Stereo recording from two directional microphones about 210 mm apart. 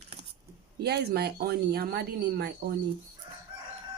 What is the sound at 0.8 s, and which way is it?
Speech, 50° right (ahead or behind).